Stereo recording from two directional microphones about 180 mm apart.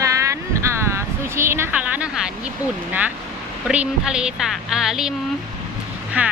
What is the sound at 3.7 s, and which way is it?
A woman's voice, 5° right (ahead or behind).